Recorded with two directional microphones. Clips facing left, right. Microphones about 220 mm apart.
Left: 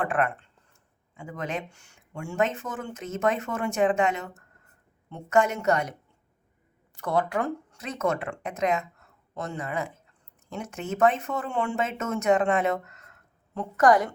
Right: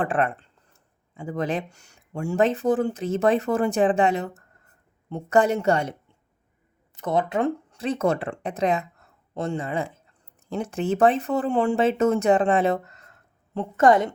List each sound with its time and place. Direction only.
0.0 s speech: 30° right (ahead or behind)
6.9 s speech: 20° right (ahead or behind)